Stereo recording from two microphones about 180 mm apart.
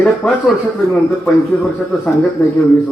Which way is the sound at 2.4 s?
15° left (ahead or behind).